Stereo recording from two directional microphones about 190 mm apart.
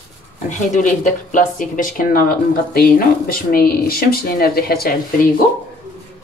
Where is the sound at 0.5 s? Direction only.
40° left (ahead or behind).